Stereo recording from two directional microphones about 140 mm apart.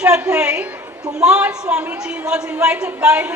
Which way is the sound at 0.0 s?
5° right (ahead or behind).